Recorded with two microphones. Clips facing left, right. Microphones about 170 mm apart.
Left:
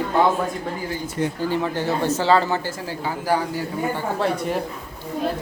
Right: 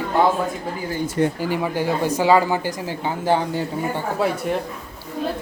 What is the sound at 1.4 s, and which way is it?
Speech, 15° right (ahead or behind).